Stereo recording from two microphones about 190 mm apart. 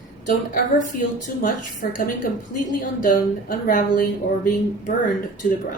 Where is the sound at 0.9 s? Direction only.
45° left (ahead or behind).